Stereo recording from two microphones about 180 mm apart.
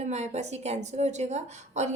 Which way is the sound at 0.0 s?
40° right (ahead or behind).